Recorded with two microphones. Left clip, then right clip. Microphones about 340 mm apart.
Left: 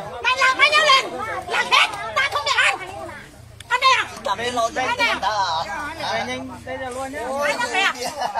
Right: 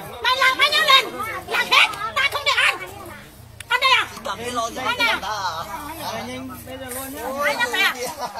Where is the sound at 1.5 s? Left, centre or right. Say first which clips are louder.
Right 1 dB; centre.